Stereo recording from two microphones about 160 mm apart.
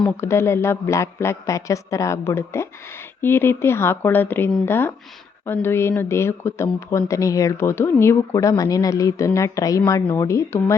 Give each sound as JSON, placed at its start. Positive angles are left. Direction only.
{"t": 0.0, "sound": "speech", "side_deg": 15}